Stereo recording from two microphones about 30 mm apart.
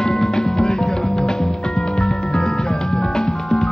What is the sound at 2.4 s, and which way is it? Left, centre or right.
Music, left.